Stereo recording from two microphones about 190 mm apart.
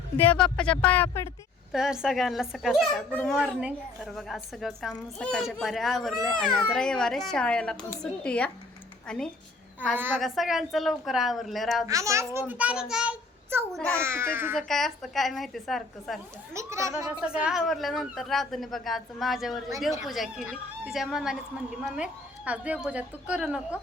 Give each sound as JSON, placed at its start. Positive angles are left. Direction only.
{"t": 0.2, "sound": "speech", "side_deg": 5}
{"t": 1.7, "sound": "a child's voice", "side_deg": -5}
{"t": 11.9, "sound": "a child's voice", "side_deg": -15}
{"t": 13.7, "sound": "speech", "side_deg": 5}
{"t": 14.0, "sound": "a child's voice", "side_deg": -15}
{"t": 14.5, "sound": "a child's voice", "side_deg": 0}
{"t": 16.6, "sound": "a child's voice", "side_deg": -15}